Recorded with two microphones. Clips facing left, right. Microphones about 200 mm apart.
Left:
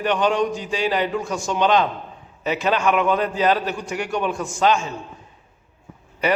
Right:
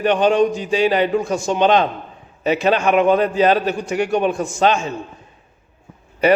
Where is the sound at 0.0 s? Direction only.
20° right (ahead or behind).